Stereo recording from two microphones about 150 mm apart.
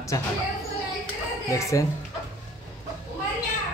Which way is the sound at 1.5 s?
20° left (ahead or behind).